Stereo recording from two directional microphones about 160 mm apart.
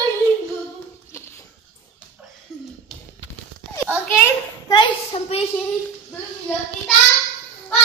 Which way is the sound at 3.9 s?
15° left (ahead or behind).